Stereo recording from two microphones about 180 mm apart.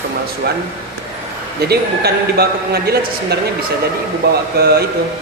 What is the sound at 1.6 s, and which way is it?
A man's voice, 60° right (ahead or behind).